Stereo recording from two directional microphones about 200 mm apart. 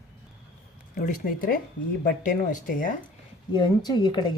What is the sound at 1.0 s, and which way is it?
A woman's voice, 40° left (ahead or behind).